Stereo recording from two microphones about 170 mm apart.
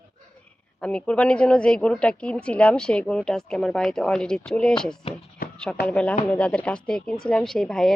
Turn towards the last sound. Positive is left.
turn(degrees=5)  # may be behind; listen again after turning